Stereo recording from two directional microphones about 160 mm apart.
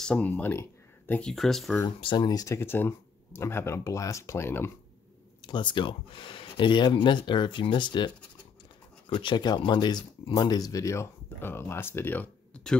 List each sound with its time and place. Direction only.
0.0 s speech: 10° left (ahead or behind)
1.9 s speech: 30° left (ahead or behind); by 4.7 s 15° left (ahead or behind)
5.5 s speech: 30° left (ahead or behind)
9.1 s speech: 30° left (ahead or behind); by 12.7 s 10° left (ahead or behind)